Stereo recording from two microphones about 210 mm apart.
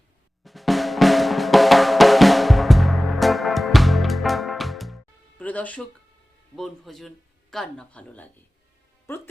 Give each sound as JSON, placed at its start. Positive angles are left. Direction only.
{"t": 0.4, "sound": "drum", "side_deg": 0}
{"t": 5.4, "sound": "music", "side_deg": 5}
{"t": 6.6, "sound": "speech", "side_deg": 0}